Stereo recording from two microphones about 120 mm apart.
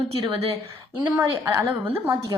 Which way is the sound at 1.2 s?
25° right (ahead or behind).